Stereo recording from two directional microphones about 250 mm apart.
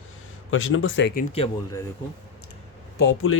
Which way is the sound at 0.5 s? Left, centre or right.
Left.